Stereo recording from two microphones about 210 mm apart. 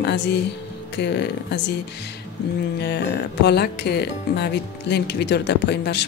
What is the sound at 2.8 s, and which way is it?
Speech, 55° left (ahead or behind).